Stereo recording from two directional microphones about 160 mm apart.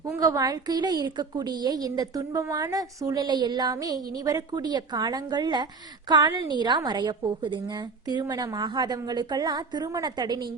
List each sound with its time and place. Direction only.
0.0 s a woman's voice: 20° right (ahead or behind)